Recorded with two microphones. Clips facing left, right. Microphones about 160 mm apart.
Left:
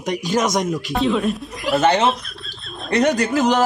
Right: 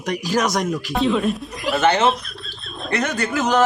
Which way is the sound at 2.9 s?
35° left (ahead or behind).